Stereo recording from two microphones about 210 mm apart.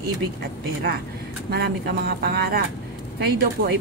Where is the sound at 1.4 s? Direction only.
50° right (ahead or behind).